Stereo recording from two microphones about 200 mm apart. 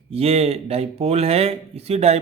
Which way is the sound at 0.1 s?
30° right (ahead or behind).